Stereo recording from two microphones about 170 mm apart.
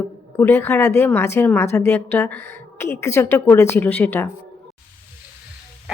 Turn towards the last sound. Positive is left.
turn(degrees=10)  # may be behind; listen again after turning